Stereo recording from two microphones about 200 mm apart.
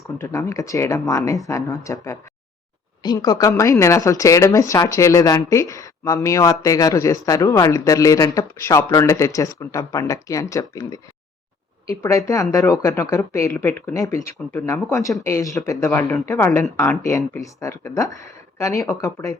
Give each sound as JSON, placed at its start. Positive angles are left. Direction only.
{"t": 0.2, "sound": "a woman's voice", "side_deg": 15}